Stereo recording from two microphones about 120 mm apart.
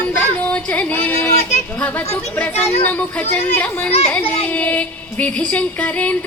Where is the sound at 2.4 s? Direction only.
20° left (ahead or behind).